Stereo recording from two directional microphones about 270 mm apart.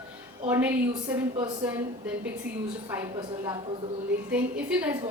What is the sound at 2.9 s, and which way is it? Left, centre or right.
A woman's voice, centre.